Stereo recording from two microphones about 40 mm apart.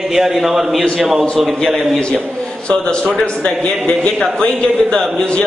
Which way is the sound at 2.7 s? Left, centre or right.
Left.